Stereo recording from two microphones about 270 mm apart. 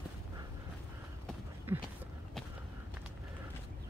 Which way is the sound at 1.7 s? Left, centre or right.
Centre.